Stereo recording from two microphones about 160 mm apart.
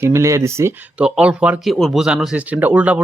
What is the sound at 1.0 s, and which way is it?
Speech, 5° right (ahead or behind).